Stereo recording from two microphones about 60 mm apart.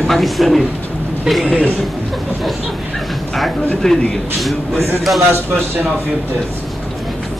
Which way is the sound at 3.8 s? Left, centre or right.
Centre.